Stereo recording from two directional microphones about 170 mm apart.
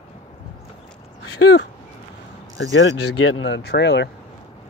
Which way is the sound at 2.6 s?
90° left.